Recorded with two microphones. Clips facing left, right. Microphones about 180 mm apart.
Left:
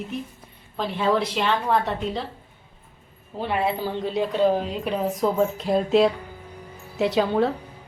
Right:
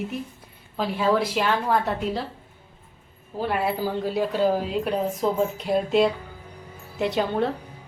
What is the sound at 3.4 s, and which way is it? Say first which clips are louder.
A woman's voice: even; 5° right (ahead or behind).